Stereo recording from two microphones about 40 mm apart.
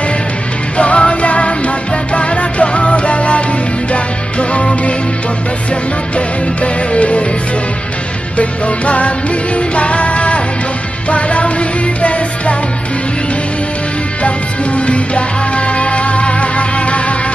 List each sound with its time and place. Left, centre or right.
0.7 s music: left
6.1 s music: left
8.4 s music: left
14.2 s music: left